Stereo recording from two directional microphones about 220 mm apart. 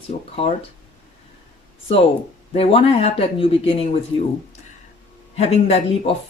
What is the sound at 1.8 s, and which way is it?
Speech, 25° left (ahead or behind).